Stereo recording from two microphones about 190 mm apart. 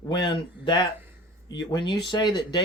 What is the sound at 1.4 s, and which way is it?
Speech, 20° left (ahead or behind).